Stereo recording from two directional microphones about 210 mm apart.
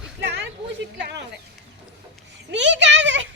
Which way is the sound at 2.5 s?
55° right (ahead or behind).